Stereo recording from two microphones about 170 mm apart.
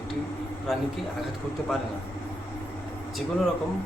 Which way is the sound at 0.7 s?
Centre (ahead or behind).